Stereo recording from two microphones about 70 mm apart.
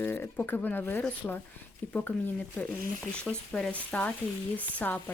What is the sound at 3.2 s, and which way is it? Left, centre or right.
Speech, centre.